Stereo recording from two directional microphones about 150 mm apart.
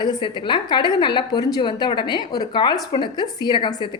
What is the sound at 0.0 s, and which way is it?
A woman's voice, 30° left (ahead or behind).